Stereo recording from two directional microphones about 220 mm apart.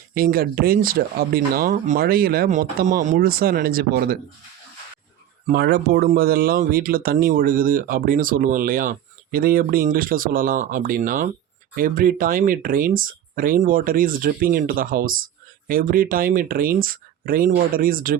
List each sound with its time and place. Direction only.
0.1 s speech: 40° right (ahead or behind)
5.5 s speech: 45° right (ahead or behind)